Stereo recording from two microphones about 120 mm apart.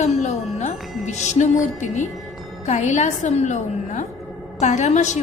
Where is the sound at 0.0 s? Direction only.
75° left (ahead or behind).